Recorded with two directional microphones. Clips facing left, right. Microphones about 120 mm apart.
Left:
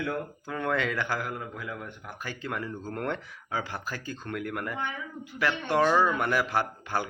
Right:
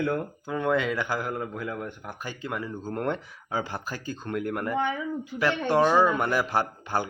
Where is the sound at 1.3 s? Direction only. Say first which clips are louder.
Right 5 dB; 30° right (ahead or behind).